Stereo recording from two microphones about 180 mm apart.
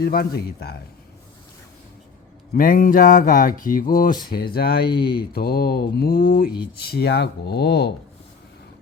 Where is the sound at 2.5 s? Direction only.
50° left (ahead or behind); by 7.9 s 65° left (ahead or behind).